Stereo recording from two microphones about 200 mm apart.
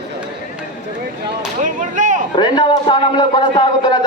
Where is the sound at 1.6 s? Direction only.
40° right (ahead or behind).